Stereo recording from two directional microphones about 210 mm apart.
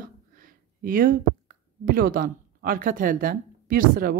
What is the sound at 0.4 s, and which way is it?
Speech, 40° right (ahead or behind).